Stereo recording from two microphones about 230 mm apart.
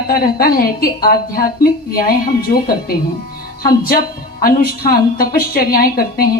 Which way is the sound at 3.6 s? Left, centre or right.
Left.